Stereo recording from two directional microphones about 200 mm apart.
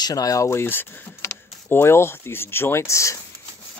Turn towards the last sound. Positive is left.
turn(degrees=15)  # may be behind; listen again after turning